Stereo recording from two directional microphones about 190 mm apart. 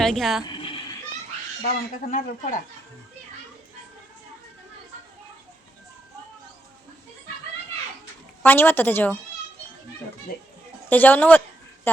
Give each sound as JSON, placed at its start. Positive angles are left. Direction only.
{"t": 0.0, "sound": "speech", "side_deg": 0}
{"t": 0.4, "sound": "bleat", "side_deg": 25}
{"t": 1.6, "sound": "speech", "side_deg": 45}
{"t": 8.4, "sound": "a woman's voice", "side_deg": 10}
{"t": 10.8, "sound": "a woman's voice", "side_deg": 10}